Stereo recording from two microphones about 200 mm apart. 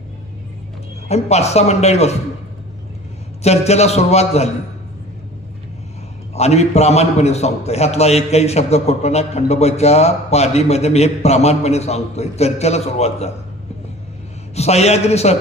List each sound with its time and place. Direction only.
1.0 s a man's voice: 35° left (ahead or behind)
3.4 s a man's voice: 30° left (ahead or behind)
6.3 s a man's voice: 30° left (ahead or behind)
14.5 s a man's voice: 30° left (ahead or behind)